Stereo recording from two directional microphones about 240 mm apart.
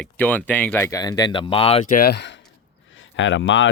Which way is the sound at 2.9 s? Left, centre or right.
Left.